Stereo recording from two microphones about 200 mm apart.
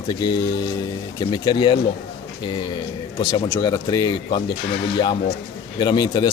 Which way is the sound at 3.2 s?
20° left (ahead or behind).